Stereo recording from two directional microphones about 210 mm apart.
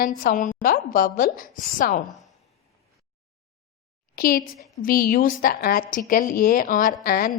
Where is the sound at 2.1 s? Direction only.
Centre (ahead or behind).